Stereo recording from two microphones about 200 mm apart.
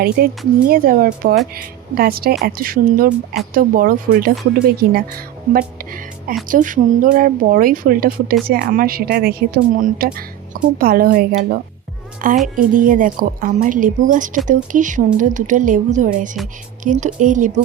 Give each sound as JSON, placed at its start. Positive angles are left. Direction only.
{"t": 0.2, "sound": "a woman's voice", "side_deg": -50}